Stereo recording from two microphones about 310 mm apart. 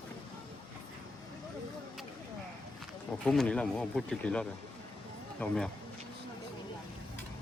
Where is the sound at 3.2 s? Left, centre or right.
Centre.